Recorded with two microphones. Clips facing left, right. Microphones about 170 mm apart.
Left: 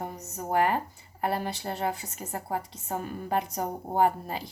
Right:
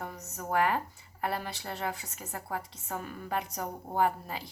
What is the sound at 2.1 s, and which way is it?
A woman's voice, 35° left (ahead or behind).